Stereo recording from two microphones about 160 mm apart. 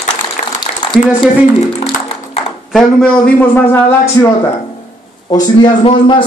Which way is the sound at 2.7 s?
5° left (ahead or behind).